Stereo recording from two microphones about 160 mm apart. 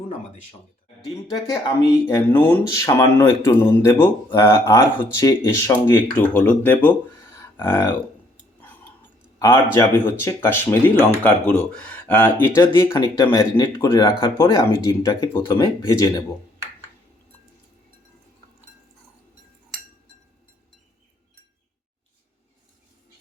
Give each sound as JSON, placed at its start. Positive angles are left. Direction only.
{"t": 1.5, "sound": "speech", "side_deg": 20}
{"t": 9.4, "sound": "speech", "side_deg": 15}
{"t": 13.8, "sound": "speech", "side_deg": 30}